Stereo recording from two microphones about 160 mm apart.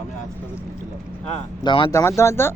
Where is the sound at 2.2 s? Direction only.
15° left (ahead or behind).